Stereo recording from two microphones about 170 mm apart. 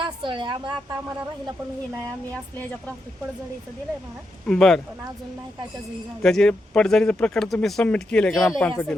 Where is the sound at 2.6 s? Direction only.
5° left (ahead or behind).